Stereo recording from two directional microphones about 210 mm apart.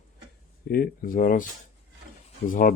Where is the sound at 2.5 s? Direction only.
40° left (ahead or behind).